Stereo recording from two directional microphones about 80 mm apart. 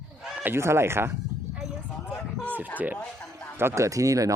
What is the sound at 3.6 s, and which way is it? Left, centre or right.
Speech, right.